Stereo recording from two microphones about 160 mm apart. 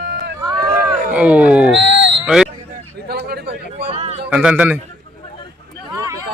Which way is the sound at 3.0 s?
90° right.